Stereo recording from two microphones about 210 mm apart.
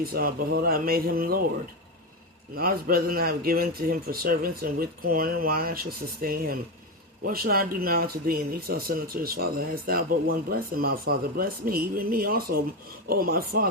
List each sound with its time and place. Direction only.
0.0 s speech: 45° right (ahead or behind)
2.6 s speech: 45° right (ahead or behind)